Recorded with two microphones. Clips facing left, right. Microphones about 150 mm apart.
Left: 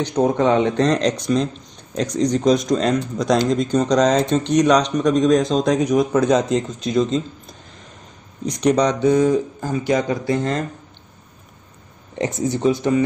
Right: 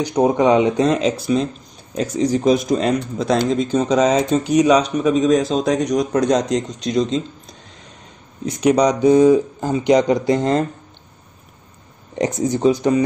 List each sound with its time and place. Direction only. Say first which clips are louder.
0.0 s speech: right 2 dB; 10° right (ahead or behind)
12.2 s speech: right 3 dB; 15° right (ahead or behind)